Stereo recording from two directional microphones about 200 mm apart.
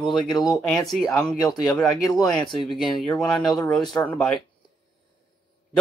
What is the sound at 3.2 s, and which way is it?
Speech, 5° left (ahead or behind).